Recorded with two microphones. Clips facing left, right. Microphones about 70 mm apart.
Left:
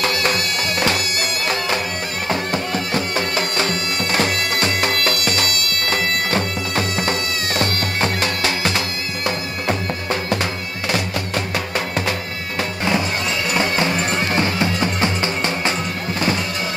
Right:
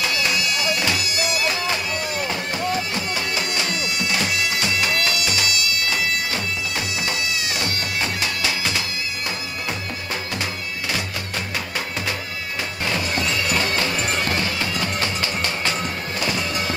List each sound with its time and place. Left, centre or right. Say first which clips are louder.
0.0 s music: left 3 dB; left
2.2 s bagpipes: left 3 dB; left
10.3 s music: left 5 dB; left
13.6 s music: left 4 dB; left